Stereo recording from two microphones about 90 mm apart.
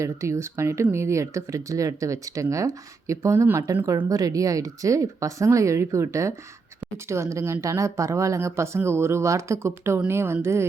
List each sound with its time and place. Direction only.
0.0 s speech: 30° right (ahead or behind)
4.1 s a woman's voice: 40° right (ahead or behind)